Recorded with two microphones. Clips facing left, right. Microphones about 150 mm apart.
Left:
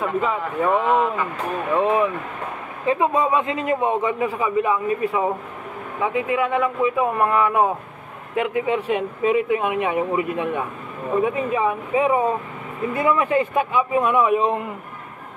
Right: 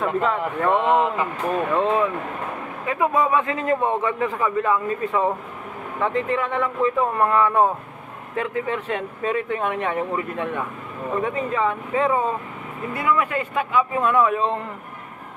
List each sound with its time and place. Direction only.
0.0 s a man's voice: 5° left (ahead or behind)
0.7 s speech: 20° right (ahead or behind)
1.7 s a man's voice: 15° left (ahead or behind)